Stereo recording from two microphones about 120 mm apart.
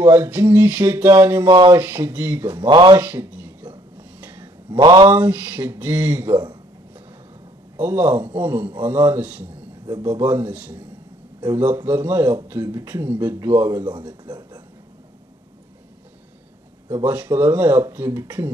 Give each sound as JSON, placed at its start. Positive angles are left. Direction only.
{"t": 0.1, "sound": "a man's voice", "side_deg": -15}
{"t": 1.0, "sound": "a sound", "side_deg": -20}
{"t": 1.5, "sound": "speech", "side_deg": -35}
{"t": 1.8, "sound": "a man's voice", "side_deg": -15}
{"t": 2.7, "sound": "speech", "side_deg": -35}
{"t": 3.0, "sound": "a sound", "side_deg": -15}
{"t": 4.6, "sound": "speech", "side_deg": -40}
{"t": 5.1, "sound": "a man's voice", "side_deg": -15}
{"t": 7.8, "sound": "a man's voice", "side_deg": -15}
{"t": 14.2, "sound": "a sound", "side_deg": -35}
{"t": 16.9, "sound": "a man's voice", "side_deg": -15}